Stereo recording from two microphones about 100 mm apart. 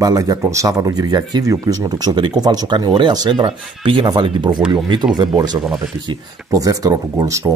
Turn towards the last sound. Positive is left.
turn(degrees=-35)  # may be behind; listen again after turning